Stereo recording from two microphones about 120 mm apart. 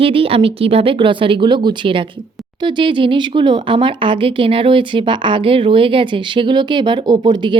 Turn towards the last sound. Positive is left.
turn(degrees=-40)  # may be behind; listen again after turning